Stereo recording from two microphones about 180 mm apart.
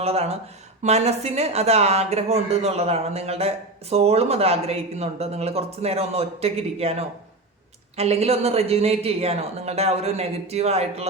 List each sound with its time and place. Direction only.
0.0 s speech: 35° right (ahead or behind)